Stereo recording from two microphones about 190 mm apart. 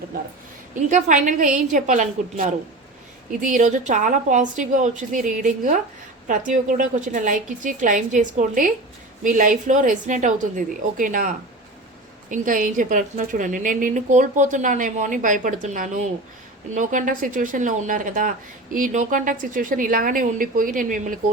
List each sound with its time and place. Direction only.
0.9 s a woman's voice: 40° right (ahead or behind)